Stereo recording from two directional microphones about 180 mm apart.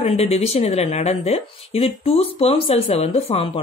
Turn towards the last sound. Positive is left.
turn(degrees=30)  # may be behind; listen again after turning